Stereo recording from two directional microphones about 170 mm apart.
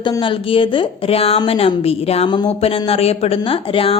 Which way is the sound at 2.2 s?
25° left (ahead or behind).